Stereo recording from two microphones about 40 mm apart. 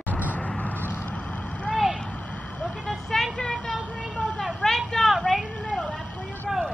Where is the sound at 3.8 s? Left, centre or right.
Left.